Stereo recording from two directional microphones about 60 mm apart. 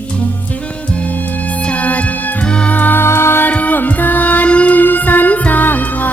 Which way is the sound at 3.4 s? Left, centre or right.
Left.